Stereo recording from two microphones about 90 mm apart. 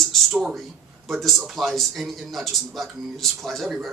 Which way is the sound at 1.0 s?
Centre (ahead or behind).